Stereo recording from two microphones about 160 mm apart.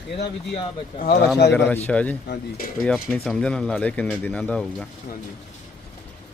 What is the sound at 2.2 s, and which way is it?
Speech, 90° left.